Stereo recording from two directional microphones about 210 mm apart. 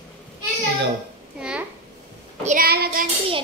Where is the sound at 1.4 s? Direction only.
5° right (ahead or behind).